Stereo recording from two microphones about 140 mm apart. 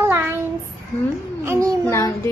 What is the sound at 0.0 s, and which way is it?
Child singing, 20° right (ahead or behind).